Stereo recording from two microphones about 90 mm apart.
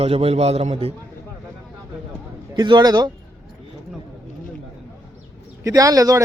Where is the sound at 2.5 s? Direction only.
55° right (ahead or behind).